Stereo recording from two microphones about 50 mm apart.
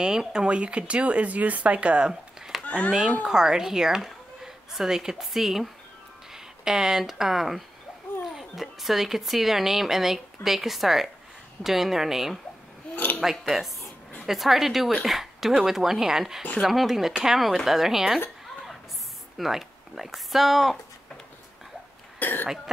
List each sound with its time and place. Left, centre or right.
0.0 s speech: centre
2.6 s a sound: left
2.9 s speech: centre
12.9 s a sound: left
13.2 s speech: centre
19.3 s speech: centre
22.2 s cough: left